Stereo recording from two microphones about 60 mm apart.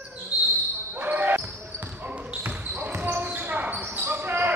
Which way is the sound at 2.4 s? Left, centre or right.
Right.